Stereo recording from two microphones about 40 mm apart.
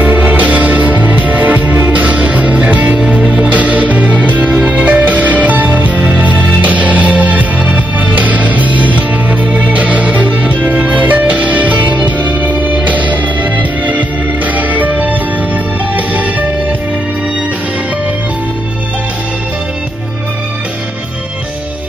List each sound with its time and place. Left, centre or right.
0.0 s music: right